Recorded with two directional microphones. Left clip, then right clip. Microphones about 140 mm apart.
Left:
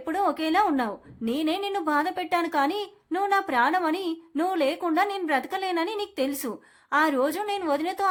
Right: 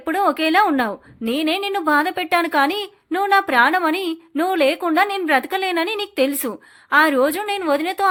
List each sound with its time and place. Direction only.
0.0 s a woman's voice: 30° right (ahead or behind)